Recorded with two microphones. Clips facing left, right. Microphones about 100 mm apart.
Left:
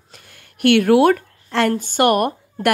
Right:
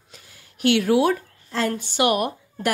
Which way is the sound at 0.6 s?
55° left (ahead or behind).